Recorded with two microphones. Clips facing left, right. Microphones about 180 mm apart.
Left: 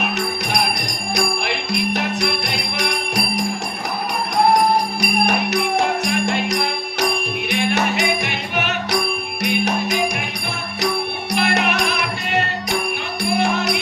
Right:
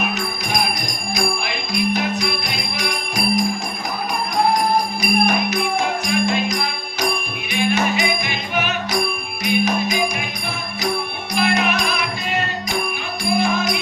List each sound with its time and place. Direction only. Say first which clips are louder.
0.5 s music: left 1 dB; 70° left (ahead or behind)
4.9 s music: right 1 dB; 70° left (ahead or behind)
11.3 s music: right 1 dB; 70° left (ahead or behind)